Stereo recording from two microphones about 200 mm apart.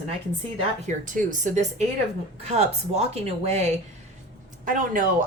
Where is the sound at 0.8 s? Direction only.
40° right (ahead or behind).